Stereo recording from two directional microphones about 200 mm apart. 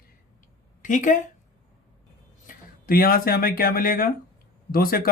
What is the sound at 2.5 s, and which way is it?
Speech, 45° left (ahead or behind).